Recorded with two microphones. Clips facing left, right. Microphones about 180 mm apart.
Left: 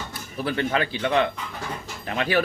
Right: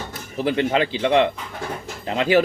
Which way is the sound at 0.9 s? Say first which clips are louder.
Right 4 dB; 25° right (ahead or behind).